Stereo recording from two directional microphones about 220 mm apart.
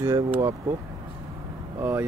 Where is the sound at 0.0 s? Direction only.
10° right (ahead or behind).